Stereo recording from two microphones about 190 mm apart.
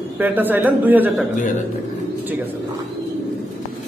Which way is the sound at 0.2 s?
10° right (ahead or behind).